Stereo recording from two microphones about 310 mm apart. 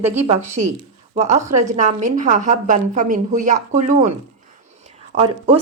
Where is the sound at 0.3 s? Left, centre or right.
Right.